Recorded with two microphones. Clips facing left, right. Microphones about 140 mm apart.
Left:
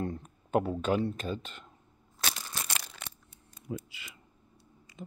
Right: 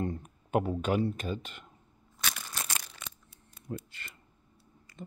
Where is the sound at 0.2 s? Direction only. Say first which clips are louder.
Left 1 dB; 10° right (ahead or behind).